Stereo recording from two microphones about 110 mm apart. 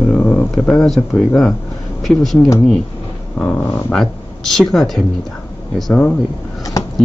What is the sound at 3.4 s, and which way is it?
Speech, 10° left (ahead or behind).